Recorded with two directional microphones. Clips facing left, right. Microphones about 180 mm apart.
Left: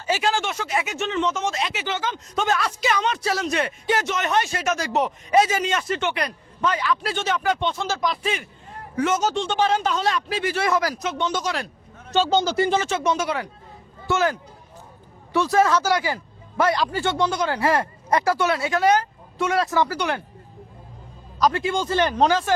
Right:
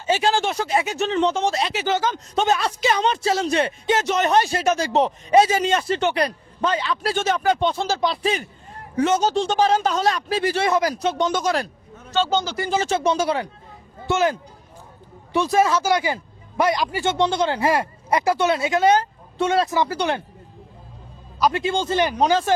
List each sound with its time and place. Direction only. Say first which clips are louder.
0.0 s speech: right 3 dB; 30° right (ahead or behind)
10.9 s speech: right 4 dB; 35° right (ahead or behind)
11.3 s speech: right 4 dB; 50° right (ahead or behind)
12.5 s speech: left 3 dB; 25° left (ahead or behind)
12.8 s speech: right 3 dB; 30° right (ahead or behind)
14.1 s speech: right 2 dB; 20° right (ahead or behind)
21.5 s speech: right 1 dB; 25° right (ahead or behind)
21.9 s speech: even; 15° right (ahead or behind)